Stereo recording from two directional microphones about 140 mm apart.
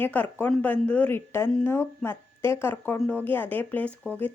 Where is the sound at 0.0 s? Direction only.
10° left (ahead or behind).